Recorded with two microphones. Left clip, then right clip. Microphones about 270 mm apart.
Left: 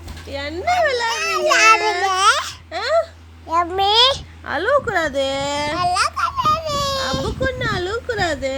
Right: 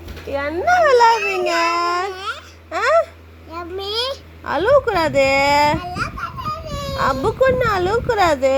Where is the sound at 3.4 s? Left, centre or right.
Left.